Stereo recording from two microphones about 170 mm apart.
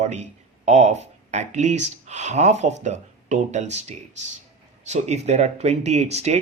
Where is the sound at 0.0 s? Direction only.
40° right (ahead or behind).